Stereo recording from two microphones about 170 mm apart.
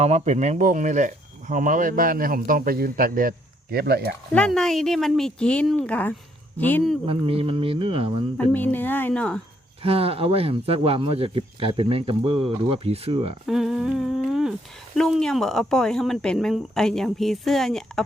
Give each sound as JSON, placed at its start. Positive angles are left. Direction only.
{"t": 0.0, "sound": "speech", "side_deg": -40}
{"t": 4.4, "sound": "speech", "side_deg": 5}
{"t": 7.0, "sound": "speech", "side_deg": -35}
{"t": 8.4, "sound": "speech", "side_deg": 10}
{"t": 9.8, "sound": "speech", "side_deg": -35}
{"t": 13.5, "sound": "humming", "side_deg": 0}
{"t": 14.9, "sound": "speech", "side_deg": 0}